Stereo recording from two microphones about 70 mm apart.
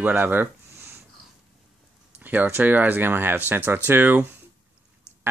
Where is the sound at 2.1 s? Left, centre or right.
Right.